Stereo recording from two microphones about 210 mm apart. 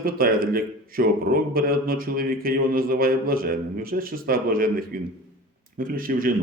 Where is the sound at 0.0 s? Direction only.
45° right (ahead or behind).